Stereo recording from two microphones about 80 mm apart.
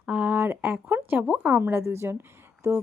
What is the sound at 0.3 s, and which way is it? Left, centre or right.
A woman's voice, right.